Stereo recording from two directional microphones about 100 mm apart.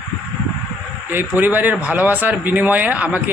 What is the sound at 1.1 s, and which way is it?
A man's voice, 20° right (ahead or behind).